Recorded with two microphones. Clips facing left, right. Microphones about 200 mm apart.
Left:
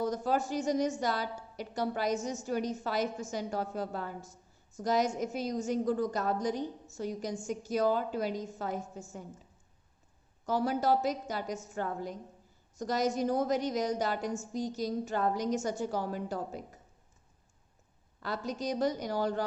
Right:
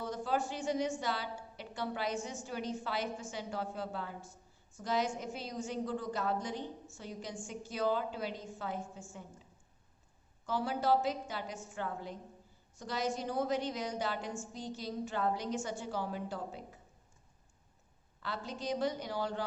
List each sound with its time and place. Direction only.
0.0 s a woman's voice: 40° left (ahead or behind)
10.4 s a woman's voice: 40° left (ahead or behind)
18.2 s a woman's voice: 40° left (ahead or behind)